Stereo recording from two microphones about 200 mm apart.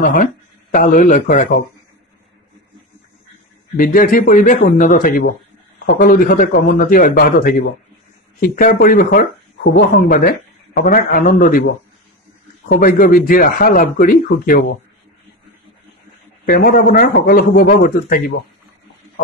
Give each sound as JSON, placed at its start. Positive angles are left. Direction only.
{"t": 0.0, "sound": "speech", "side_deg": 40}
{"t": 3.7, "sound": "a man's voice", "side_deg": 45}
{"t": 12.6, "sound": "a man's voice", "side_deg": 45}
{"t": 16.4, "sound": "a man's voice", "side_deg": 45}